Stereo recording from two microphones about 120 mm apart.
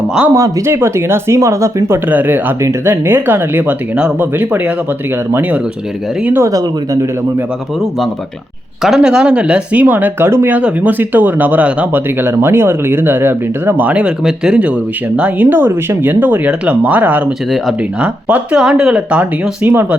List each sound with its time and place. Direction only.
0.3 s speech: 25° right (ahead or behind)
8.8 s speech: 5° right (ahead or behind)